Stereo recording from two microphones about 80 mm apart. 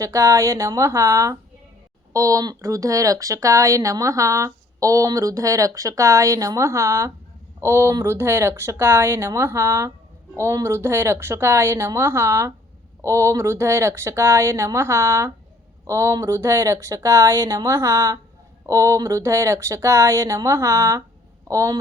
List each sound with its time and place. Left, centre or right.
0.0 s speech: right